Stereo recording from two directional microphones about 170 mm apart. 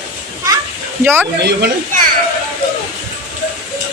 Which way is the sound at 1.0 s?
10° right (ahead or behind).